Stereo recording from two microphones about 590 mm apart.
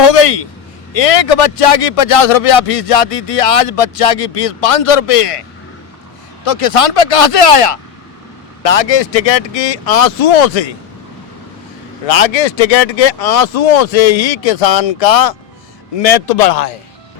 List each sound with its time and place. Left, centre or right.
0.0 s a man's voice: left
12.0 s a man's voice: left